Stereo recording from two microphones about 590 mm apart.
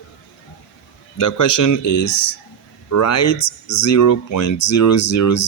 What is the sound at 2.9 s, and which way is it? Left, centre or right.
Speech, left.